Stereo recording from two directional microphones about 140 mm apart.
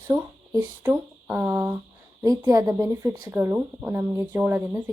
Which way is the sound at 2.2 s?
25° right (ahead or behind).